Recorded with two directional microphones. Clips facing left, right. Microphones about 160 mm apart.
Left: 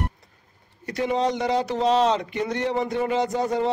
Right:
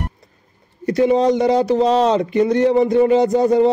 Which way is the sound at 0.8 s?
35° right (ahead or behind).